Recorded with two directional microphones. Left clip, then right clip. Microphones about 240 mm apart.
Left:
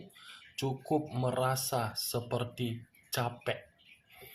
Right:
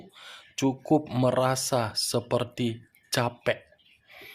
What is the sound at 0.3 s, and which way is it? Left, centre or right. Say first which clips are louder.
Speech: right 9 dB; right.